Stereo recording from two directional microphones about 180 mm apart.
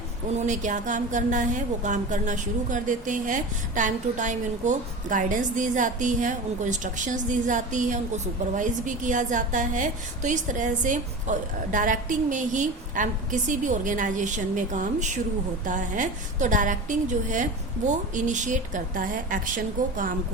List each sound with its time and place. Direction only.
0.3 s a woman's voice: 45° right (ahead or behind)